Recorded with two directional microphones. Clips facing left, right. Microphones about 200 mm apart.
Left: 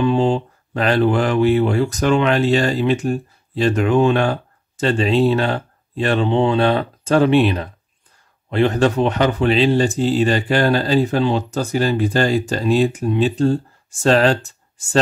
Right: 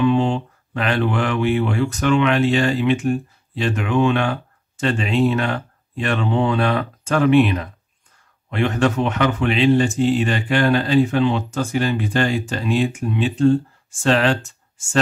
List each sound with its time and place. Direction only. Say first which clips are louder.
0.0 s speech: left 1 dB; 35° left (ahead or behind)